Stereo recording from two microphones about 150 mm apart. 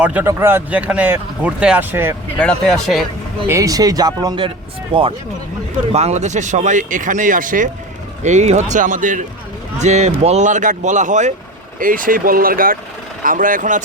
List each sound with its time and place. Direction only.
0.0 s speech: 10° right (ahead or behind)
2.4 s speech: 5° left (ahead or behind)
3.4 s speech: 20° right (ahead or behind)
5.9 s speech: 45° right (ahead or behind); by 7.7 s 60° right (ahead or behind)
8.2 s speech: 50° right (ahead or behind)
9.7 s speech: 50° right (ahead or behind)
11.8 s speech: 65° right (ahead or behind)